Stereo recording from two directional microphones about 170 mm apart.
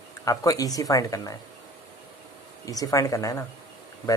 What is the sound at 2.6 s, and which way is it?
Speech, 20° left (ahead or behind).